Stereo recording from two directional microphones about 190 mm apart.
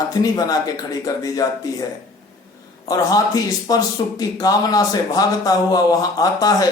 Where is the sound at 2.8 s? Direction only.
20° left (ahead or behind).